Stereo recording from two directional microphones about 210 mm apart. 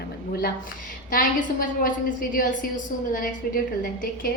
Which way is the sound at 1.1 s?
40° left (ahead or behind).